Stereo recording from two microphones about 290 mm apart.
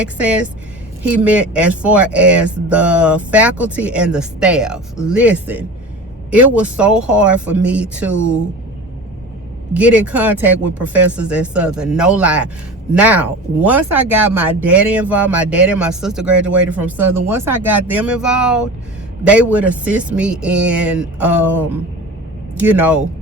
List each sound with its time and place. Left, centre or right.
0.0 s speech: centre
9.7 s speech: centre